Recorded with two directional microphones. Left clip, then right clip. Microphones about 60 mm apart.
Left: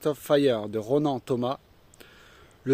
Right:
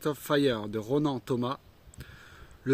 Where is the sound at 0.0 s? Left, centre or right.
Right.